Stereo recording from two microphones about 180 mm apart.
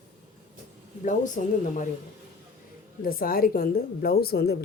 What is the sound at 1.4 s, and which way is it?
Speech, 45° left (ahead or behind).